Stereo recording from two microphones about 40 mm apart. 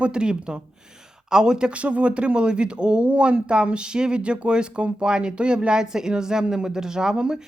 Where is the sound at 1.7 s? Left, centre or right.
Right; by 7.4 s centre.